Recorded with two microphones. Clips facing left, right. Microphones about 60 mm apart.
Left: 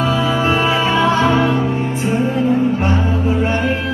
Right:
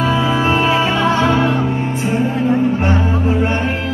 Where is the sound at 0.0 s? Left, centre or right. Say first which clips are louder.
Right 1 dB; right.